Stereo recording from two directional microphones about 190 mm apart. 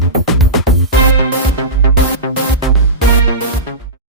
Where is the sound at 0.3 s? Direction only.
Centre (ahead or behind).